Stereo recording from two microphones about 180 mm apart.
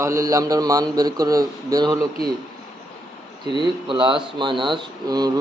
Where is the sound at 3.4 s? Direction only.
25° right (ahead or behind).